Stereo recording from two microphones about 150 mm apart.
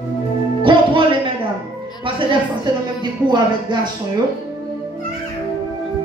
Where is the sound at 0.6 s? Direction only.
35° right (ahead or behind).